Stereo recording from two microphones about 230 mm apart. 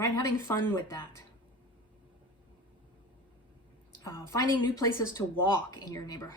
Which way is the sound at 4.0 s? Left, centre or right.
Centre.